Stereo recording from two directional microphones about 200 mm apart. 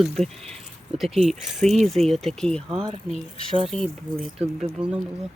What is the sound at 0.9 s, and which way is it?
Speech, centre (ahead or behind).